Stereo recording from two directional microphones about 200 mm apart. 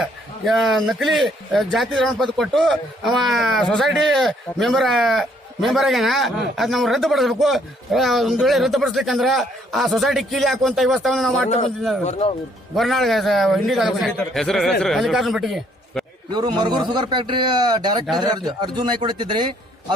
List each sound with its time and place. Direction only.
0.0 s speech: centre (ahead or behind)
11.4 s speech: 35° left (ahead or behind)
12.7 s speech: centre (ahead or behind)
16.3 s a man's voice: 20° right (ahead or behind)